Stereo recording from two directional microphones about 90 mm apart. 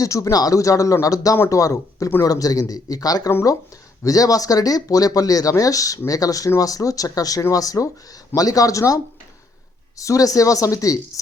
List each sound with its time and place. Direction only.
0.0 s speech: 40° left (ahead or behind)
10.0 s speech: 40° left (ahead or behind)